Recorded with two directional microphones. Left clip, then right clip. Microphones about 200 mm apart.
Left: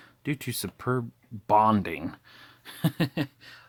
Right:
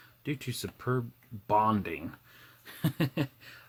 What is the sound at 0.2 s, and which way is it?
Speech, 45° left (ahead or behind).